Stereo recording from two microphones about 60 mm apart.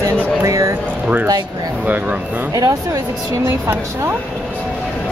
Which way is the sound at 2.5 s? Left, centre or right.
Right.